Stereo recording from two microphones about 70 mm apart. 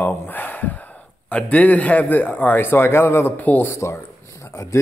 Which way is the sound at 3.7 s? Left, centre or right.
Left.